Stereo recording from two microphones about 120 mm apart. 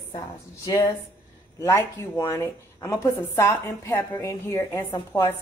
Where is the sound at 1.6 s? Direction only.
25° left (ahead or behind).